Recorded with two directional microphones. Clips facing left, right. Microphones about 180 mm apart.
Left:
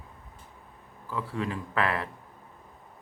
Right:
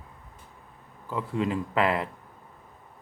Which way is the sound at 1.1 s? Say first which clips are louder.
Right 4 dB; 20° right (ahead or behind).